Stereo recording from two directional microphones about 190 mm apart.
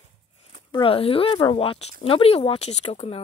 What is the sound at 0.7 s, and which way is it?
Speech, 25° left (ahead or behind).